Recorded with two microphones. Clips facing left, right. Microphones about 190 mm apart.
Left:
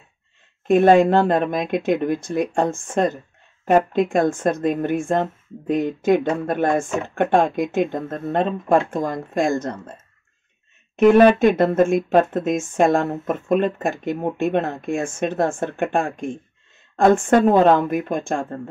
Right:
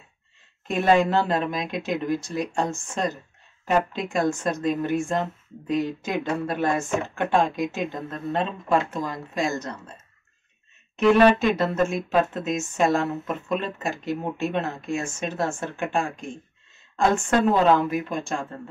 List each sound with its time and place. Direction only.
0.7 s speech: 50° left (ahead or behind)
11.0 s speech: 50° left (ahead or behind)